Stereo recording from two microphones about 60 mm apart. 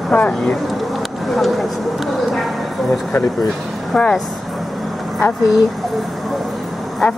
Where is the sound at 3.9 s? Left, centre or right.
Centre.